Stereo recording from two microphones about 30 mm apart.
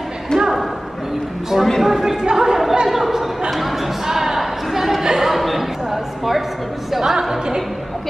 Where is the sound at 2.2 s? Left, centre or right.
Centre.